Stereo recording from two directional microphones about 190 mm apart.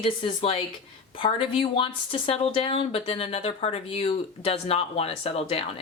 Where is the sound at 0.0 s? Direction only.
30° left (ahead or behind).